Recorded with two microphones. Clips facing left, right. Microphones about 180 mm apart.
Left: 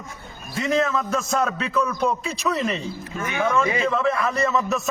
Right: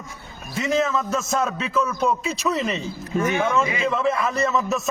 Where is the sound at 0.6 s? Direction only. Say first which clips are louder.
Even; centre (ahead or behind).